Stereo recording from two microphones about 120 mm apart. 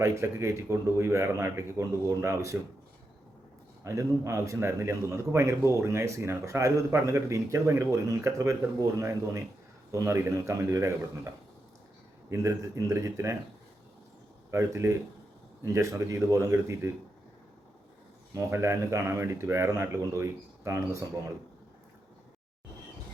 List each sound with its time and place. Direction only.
0.0 s speech: 25° right (ahead or behind)
3.8 s speech: 25° right (ahead or behind)
12.3 s speech: 25° right (ahead or behind)
14.5 s speech: 25° right (ahead or behind)
18.3 s speech: 25° right (ahead or behind)